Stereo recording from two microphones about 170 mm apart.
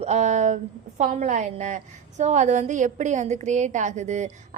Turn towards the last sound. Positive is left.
turn(degrees=-45)  # may be behind; listen again after turning